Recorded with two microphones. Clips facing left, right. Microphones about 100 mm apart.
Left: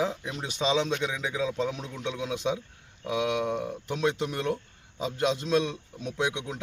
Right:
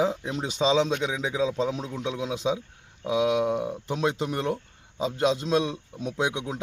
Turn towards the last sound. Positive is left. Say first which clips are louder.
# right 2 dB
turn(degrees=-15)  # may be behind; listen again after turning